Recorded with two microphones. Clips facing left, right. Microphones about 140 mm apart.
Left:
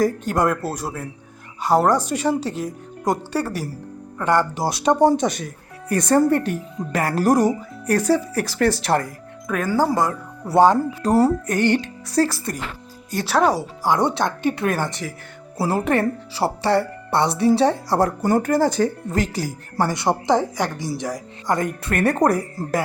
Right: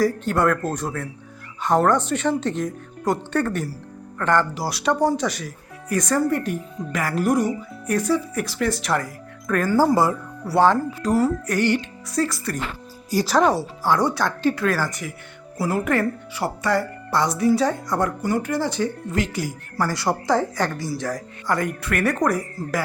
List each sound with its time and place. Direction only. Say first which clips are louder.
0.3 s a woman's voice: even; 15° left (ahead or behind); by 9.0 s 35° left (ahead or behind)
9.5 s speech: right 2 dB; 5° left (ahead or behind)
9.7 s speech: right 2 dB; 5° right (ahead or behind)
10.4 s a woman's voice: left 3 dB; 15° left (ahead or behind)
11.0 s speech: left 4 dB; 30° left (ahead or behind)
11.8 s speech: left 4 dB; 35° left (ahead or behind)
13.1 s speech: even; centre (ahead or behind); by 19.8 s 35° left (ahead or behind)
19.8 s speech: left 2 dB; 20° left (ahead or behind)